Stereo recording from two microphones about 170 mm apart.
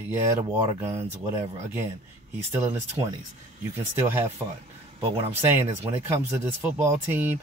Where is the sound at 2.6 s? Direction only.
15° right (ahead or behind).